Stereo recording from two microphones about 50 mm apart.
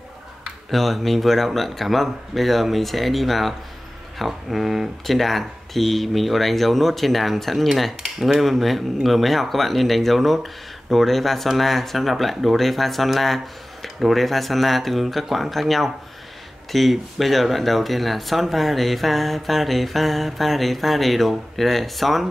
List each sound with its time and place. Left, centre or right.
0.7 s speech: centre